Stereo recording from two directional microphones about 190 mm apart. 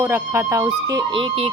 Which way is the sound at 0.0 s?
15° right (ahead or behind).